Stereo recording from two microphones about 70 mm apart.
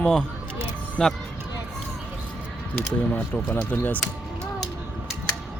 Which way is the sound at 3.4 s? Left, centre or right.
Left.